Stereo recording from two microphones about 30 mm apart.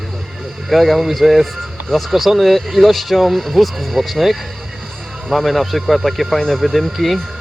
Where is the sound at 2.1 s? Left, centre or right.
Centre.